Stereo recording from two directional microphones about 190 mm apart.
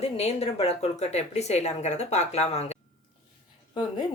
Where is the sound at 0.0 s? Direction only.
35° left (ahead or behind).